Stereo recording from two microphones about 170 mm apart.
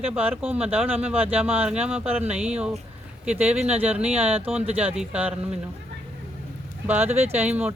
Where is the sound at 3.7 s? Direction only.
10° right (ahead or behind).